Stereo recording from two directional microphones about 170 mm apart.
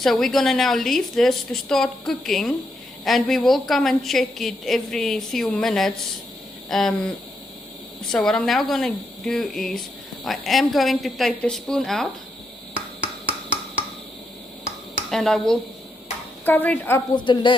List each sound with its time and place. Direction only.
0.0 s a woman's voice: centre (ahead or behind)
8.1 s a woman's voice: 5° left (ahead or behind)
14.9 s speech: 5° left (ahead or behind)
17.2 s speech: 30° left (ahead or behind)